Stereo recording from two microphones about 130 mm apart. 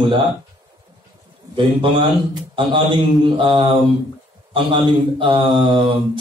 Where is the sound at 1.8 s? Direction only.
40° right (ahead or behind).